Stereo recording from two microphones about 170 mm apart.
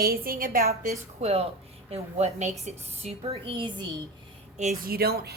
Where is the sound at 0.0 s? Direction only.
60° right (ahead or behind).